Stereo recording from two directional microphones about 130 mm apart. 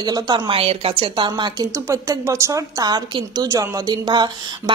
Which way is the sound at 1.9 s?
20° right (ahead or behind).